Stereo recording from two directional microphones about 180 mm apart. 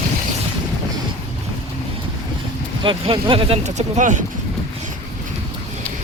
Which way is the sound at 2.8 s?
30° right (ahead or behind).